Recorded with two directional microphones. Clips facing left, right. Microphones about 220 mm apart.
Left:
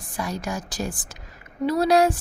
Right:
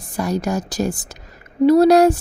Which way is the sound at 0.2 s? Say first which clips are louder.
Right 8 dB; 40° right (ahead or behind).